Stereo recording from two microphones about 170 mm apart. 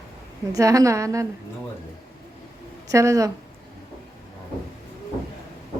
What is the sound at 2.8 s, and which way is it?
Speech, 20° right (ahead or behind).